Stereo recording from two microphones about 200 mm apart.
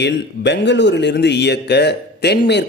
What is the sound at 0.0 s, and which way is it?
Speech, 60° left (ahead or behind).